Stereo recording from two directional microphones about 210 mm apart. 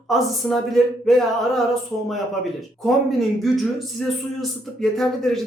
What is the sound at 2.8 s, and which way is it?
A man's voice, centre (ahead or behind).